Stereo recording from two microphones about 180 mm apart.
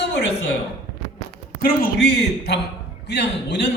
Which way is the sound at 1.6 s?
55° left (ahead or behind).